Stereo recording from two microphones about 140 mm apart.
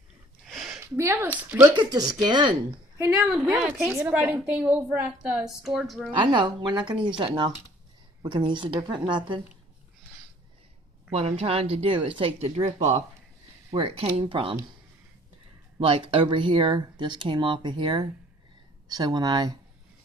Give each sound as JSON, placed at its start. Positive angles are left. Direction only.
{"t": 0.5, "sound": "a sound", "side_deg": -5}
{"t": 0.7, "sound": "a woman's voice", "side_deg": -20}
{"t": 1.7, "sound": "speech", "side_deg": -30}
{"t": 3.1, "sound": "a woman's voice", "side_deg": -5}
{"t": 3.9, "sound": "a woman's voice", "side_deg": -10}
{"t": 6.1, "sound": "speech", "side_deg": -35}
{"t": 11.1, "sound": "speech", "side_deg": -45}
{"t": 15.8, "sound": "speech", "side_deg": -40}